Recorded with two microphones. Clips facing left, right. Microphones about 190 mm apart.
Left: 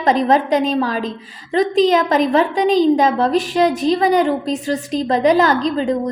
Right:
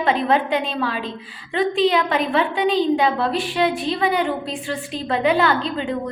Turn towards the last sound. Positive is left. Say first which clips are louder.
# left 5 dB
turn(degrees=40)  # may be behind; listen again after turning